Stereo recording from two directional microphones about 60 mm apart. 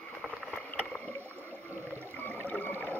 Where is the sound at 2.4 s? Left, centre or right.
Left.